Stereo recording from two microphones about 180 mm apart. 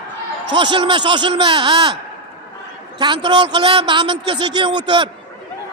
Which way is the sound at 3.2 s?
25° right (ahead or behind).